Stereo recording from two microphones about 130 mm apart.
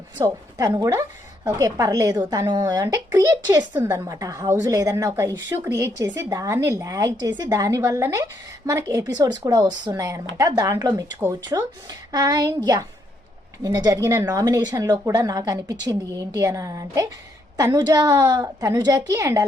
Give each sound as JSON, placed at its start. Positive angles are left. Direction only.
{"t": 0.5, "sound": "a woman's voice", "side_deg": -30}
{"t": 13.6, "sound": "a woman's voice", "side_deg": -30}